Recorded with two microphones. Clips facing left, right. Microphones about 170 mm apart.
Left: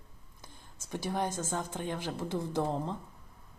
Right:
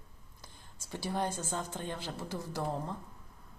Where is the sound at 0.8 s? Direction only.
15° left (ahead or behind).